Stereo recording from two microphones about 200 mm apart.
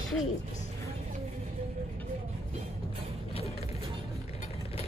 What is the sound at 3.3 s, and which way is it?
Vehicle, 30° left (ahead or behind).